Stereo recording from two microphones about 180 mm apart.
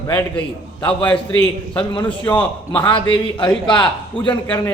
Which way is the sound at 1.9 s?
25° left (ahead or behind).